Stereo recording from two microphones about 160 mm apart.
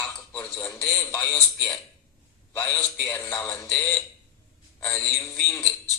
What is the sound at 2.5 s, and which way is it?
Speech, 10° left (ahead or behind).